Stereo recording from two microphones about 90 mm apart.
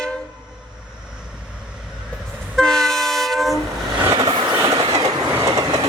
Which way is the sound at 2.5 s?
5° left (ahead or behind).